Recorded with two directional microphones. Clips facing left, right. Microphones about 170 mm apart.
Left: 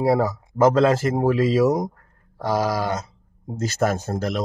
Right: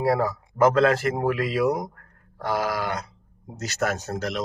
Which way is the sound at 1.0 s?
30° left (ahead or behind).